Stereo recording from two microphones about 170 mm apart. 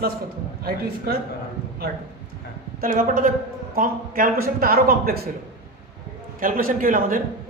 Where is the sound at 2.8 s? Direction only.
55° right (ahead or behind).